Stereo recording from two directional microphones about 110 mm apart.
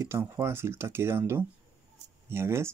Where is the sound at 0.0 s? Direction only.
25° right (ahead or behind).